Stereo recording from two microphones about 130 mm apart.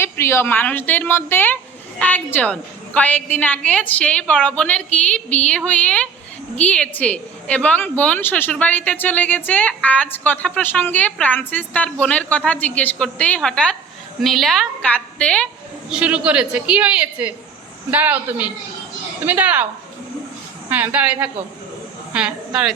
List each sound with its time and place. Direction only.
0.0 s a woman's voice: 20° left (ahead or behind)
15.9 s a woman's voice: 10° right (ahead or behind)
20.7 s a woman's voice: 15° right (ahead or behind)